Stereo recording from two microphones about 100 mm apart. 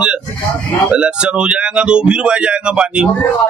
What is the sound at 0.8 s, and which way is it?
Speech, 10° right (ahead or behind).